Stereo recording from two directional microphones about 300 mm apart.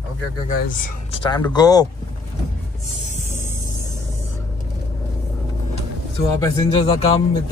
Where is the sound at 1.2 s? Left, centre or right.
Centre.